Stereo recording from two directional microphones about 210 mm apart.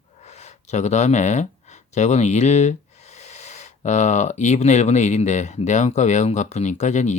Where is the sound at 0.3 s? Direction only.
35° left (ahead or behind).